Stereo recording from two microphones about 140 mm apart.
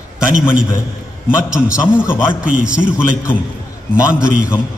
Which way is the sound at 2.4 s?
5° right (ahead or behind).